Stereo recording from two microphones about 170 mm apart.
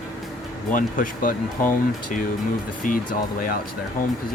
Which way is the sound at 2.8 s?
55° left (ahead or behind).